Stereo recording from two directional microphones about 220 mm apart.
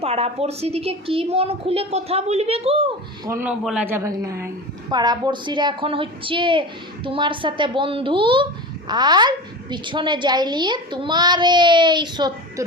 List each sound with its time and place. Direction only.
0.0 s a woman's voice: 25° right (ahead or behind)
3.2 s a woman's voice: 10° right (ahead or behind)